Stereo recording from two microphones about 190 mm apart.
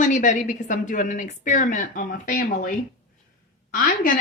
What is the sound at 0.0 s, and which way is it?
A woman's voice, 40° left (ahead or behind).